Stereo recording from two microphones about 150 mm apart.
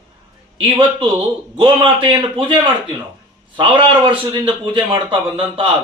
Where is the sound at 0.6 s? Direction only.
35° right (ahead or behind).